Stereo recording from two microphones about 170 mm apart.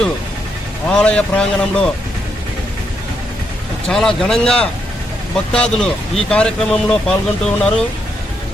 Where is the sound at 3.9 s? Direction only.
5° left (ahead or behind).